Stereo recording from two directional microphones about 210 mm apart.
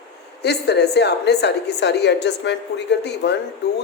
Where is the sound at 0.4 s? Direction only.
50° left (ahead or behind).